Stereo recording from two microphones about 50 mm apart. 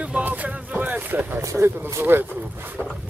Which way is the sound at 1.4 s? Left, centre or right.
Right.